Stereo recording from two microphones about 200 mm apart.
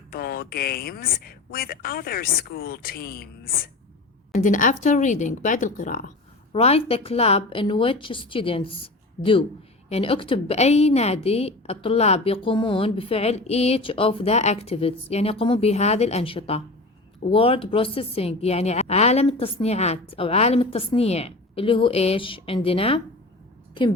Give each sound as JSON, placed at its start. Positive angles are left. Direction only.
{"t": 0.1, "sound": "a woman's voice", "side_deg": 45}
{"t": 6.5, "sound": "a woman's voice", "side_deg": 30}